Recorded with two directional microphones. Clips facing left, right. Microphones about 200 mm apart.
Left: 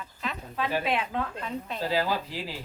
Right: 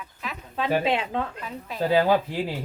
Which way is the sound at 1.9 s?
55° right (ahead or behind).